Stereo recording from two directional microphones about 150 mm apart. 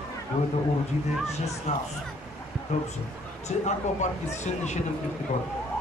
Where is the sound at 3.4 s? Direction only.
50° left (ahead or behind).